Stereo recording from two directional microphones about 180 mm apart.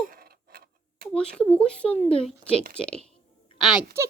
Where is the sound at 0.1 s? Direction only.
55° right (ahead or behind).